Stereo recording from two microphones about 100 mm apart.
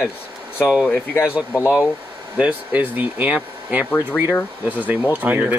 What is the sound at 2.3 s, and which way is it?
Speech, 15° right (ahead or behind).